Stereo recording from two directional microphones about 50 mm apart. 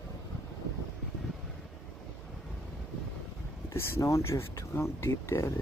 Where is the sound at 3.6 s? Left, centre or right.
Left.